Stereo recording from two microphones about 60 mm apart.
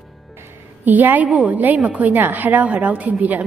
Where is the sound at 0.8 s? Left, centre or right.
Right.